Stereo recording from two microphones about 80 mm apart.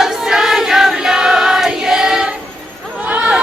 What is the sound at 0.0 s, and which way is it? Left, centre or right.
Choir, centre.